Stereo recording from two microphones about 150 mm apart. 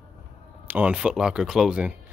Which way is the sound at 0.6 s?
10° right (ahead or behind).